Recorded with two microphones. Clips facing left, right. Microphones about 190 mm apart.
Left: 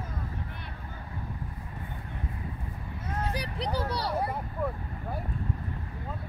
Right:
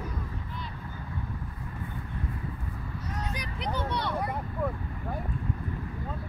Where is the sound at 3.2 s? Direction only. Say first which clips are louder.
Left 3 dB; 35° left (ahead or behind).